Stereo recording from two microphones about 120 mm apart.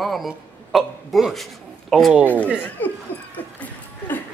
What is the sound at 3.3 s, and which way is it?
Music, 15° left (ahead or behind).